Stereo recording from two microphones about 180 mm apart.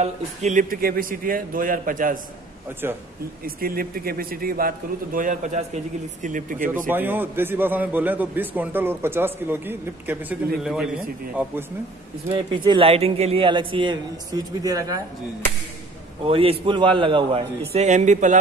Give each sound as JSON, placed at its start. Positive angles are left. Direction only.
{"t": 0.0, "sound": "a man's voice", "side_deg": -40}
{"t": 3.4, "sound": "a man's voice", "side_deg": -55}
{"t": 6.9, "sound": "a man's voice", "side_deg": -10}
{"t": 12.3, "sound": "a man's voice", "side_deg": -25}
{"t": 16.3, "sound": "a man's voice", "side_deg": -30}